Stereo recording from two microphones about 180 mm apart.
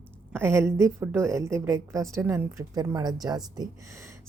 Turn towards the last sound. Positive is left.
turn(degrees=-20)  # may be behind; listen again after turning